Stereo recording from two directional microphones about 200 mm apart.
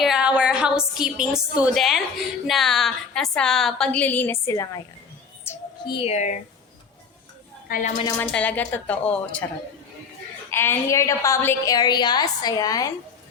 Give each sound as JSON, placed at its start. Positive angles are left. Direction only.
{"t": 0.0, "sound": "a woman's voice", "side_deg": -5}
{"t": 5.5, "sound": "music", "side_deg": 10}
{"t": 5.8, "sound": "speech", "side_deg": 25}
{"t": 7.7, "sound": "speech", "side_deg": 40}
{"t": 8.0, "sound": "a woman's voice", "side_deg": 15}
{"t": 10.5, "sound": "a woman's voice", "side_deg": 10}